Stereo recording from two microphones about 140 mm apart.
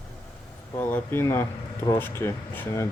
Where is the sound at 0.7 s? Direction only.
15° left (ahead or behind).